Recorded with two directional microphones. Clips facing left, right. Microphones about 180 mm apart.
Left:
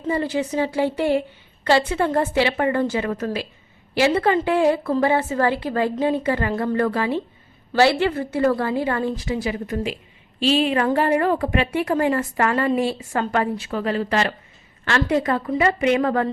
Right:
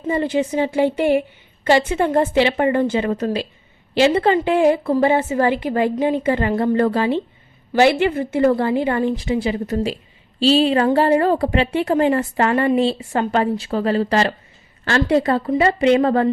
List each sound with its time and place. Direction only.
0.1 s a woman's voice: 20° right (ahead or behind)